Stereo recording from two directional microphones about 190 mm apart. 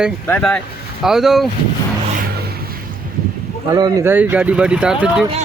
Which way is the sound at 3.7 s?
20° right (ahead or behind).